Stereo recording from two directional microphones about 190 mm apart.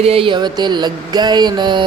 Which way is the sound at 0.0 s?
30° right (ahead or behind).